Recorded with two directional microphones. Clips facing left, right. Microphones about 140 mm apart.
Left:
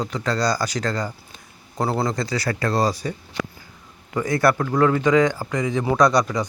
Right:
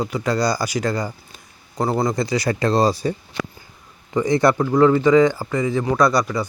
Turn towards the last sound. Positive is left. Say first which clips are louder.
# even
turn(degrees=-5)  # may be behind; listen again after turning